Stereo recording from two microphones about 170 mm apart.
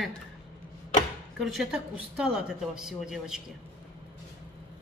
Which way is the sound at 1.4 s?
Centre (ahead or behind).